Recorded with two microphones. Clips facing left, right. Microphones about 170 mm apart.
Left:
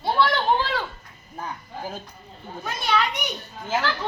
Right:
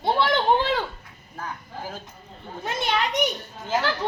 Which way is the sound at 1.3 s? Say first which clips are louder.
Left 1 dB; 20° left (ahead or behind).